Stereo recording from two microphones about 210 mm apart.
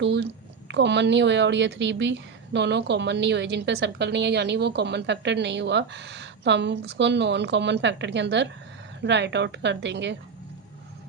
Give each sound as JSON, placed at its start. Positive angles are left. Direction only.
{"t": 0.0, "sound": "a woman's voice", "side_deg": -55}